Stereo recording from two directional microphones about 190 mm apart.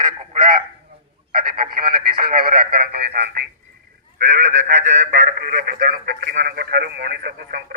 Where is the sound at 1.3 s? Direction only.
50° right (ahead or behind).